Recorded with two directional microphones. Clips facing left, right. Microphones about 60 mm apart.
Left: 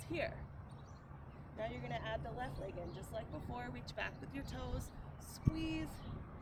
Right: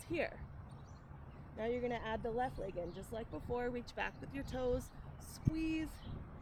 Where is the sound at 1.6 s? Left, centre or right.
Right.